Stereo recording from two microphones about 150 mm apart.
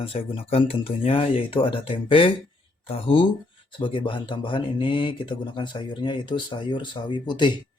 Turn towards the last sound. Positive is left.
turn(degrees=30)  # may be behind; listen again after turning